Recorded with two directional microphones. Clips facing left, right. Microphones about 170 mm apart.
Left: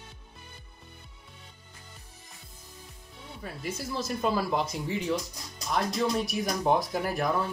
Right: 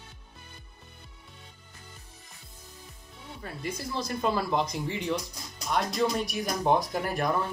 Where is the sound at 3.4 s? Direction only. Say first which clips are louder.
Even; 5° left (ahead or behind).